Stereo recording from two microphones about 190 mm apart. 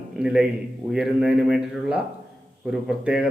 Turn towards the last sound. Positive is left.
turn(degrees=-5)  # may be behind; listen again after turning